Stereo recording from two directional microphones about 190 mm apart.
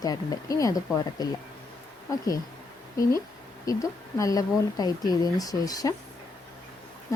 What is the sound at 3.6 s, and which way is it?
Speech, 15° left (ahead or behind).